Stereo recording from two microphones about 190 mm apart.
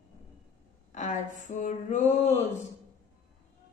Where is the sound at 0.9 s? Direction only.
40° left (ahead or behind).